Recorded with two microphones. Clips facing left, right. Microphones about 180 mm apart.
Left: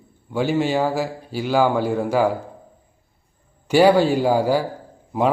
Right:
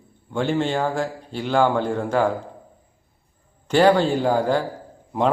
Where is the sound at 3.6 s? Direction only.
10° left (ahead or behind).